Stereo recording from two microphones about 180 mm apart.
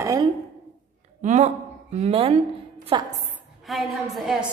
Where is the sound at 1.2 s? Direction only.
40° right (ahead or behind).